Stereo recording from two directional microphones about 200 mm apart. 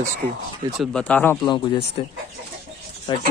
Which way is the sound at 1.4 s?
25° left (ahead or behind).